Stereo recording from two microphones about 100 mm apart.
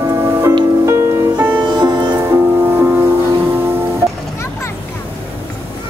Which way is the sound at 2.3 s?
25° right (ahead or behind).